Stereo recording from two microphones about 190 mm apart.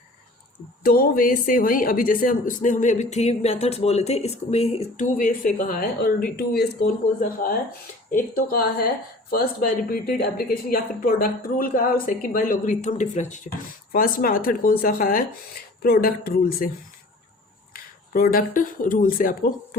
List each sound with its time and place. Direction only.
0.8 s speech: 50° left (ahead or behind); by 5.0 s 30° left (ahead or behind)
5.1 s a woman's voice: 45° left (ahead or behind)
17.7 s speech: 50° left (ahead or behind)